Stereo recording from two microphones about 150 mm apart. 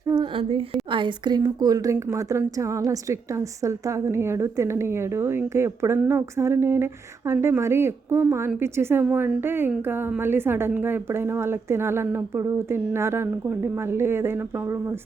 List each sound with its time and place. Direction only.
0.1 s a woman's voice: 35° right (ahead or behind); by 14.9 s 15° right (ahead or behind)